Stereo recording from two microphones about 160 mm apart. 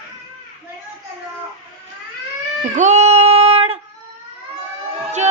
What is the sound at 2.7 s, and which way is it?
Female singing, 50° right (ahead or behind).